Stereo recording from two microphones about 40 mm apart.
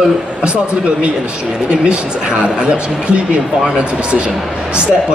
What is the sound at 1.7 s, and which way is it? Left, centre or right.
A man's voice, right.